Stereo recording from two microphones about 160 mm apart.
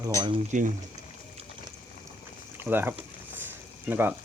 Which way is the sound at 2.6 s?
15° right (ahead or behind).